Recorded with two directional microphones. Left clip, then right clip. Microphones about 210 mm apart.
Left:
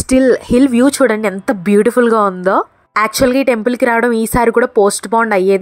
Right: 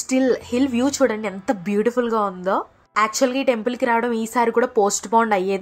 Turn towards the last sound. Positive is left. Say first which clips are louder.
# left 7 dB
turn(degrees=30)  # may be behind; listen again after turning